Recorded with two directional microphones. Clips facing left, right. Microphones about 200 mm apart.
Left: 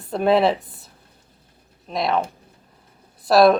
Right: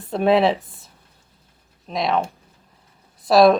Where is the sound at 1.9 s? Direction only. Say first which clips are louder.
Even; centre (ahead or behind).